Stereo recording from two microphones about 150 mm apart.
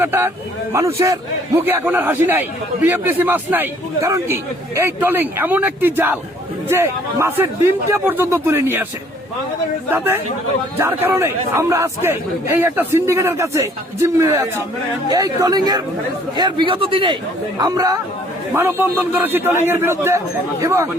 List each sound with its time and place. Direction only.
0.0 s a man's voice: 15° right (ahead or behind)
9.9 s a man's voice: 15° right (ahead or behind); by 17.2 s 35° right (ahead or behind)
17.6 s a man's voice: 25° right (ahead or behind)